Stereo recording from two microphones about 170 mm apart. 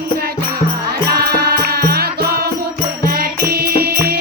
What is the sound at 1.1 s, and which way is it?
Music, 65° right (ahead or behind).